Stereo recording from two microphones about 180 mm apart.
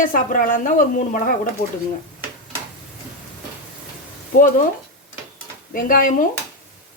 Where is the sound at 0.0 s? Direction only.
50° left (ahead or behind).